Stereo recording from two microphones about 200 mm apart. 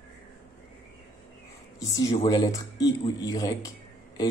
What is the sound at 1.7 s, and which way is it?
Speech, 20° left (ahead or behind).